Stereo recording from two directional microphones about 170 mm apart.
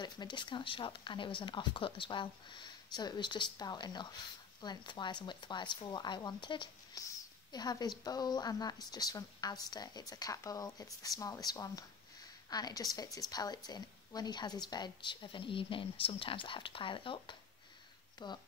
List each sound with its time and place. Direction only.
0.0 s a woman's voice: 25° left (ahead or behind)